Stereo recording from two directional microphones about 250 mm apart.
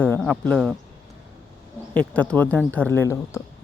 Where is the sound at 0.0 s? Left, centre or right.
Centre.